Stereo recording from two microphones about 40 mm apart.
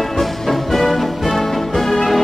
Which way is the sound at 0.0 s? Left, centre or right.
Centre.